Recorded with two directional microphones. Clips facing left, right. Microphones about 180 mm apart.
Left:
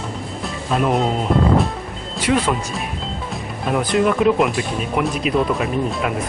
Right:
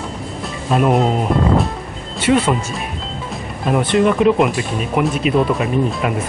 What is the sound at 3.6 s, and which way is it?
Speech, centre (ahead or behind).